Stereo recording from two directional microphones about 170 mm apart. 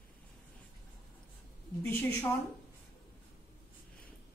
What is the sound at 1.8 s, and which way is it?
Speech, 15° left (ahead or behind).